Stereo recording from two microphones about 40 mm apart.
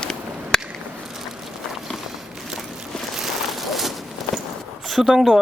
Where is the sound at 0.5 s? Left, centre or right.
Centre.